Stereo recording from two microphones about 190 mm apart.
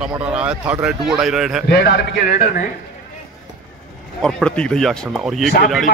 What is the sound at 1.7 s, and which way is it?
Speech, 60° left (ahead or behind).